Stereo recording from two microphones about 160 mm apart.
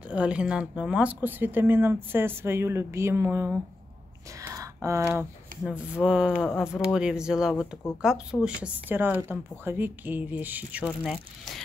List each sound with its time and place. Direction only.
0.1 s speech: 5° right (ahead or behind)
4.4 s a sound: 20° right (ahead or behind)
5.6 s speech: 5° right (ahead or behind)
10.9 s speech: 5° left (ahead or behind)